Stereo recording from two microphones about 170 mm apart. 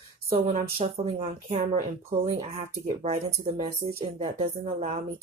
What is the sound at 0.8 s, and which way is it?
Speech, 35° right (ahead or behind).